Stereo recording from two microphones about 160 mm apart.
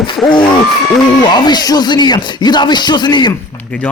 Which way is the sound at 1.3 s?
25° left (ahead or behind).